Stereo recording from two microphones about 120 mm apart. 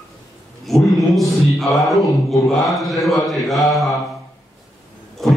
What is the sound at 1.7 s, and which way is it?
Mantra, centre (ahead or behind).